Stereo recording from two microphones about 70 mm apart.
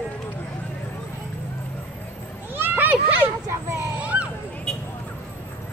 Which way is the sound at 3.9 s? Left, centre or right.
Centre.